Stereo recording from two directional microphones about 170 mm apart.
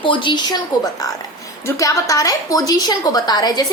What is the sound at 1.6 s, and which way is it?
A woman's voice, 20° left (ahead or behind).